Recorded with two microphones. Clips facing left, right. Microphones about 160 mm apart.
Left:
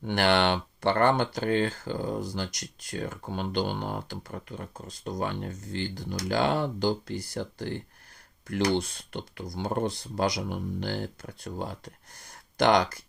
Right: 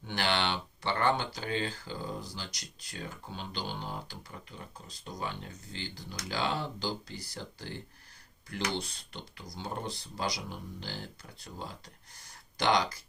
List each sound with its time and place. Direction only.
0.0 s speech: 55° left (ahead or behind)